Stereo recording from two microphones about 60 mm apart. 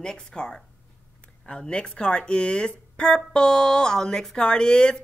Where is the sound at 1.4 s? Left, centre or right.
Centre.